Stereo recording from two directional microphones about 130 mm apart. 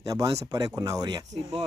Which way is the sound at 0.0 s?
25° right (ahead or behind).